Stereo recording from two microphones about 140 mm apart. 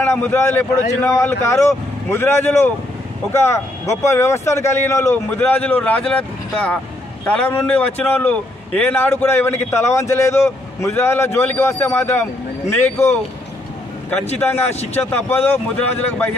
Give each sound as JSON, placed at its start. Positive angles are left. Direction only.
{"t": 0.0, "sound": "a man's voice", "side_deg": 15}
{"t": 5.6, "sound": "a man's voice", "side_deg": 10}
{"t": 14.4, "sound": "a man's voice", "side_deg": 15}